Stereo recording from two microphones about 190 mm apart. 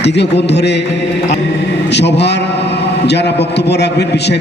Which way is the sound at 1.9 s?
65° left (ahead or behind).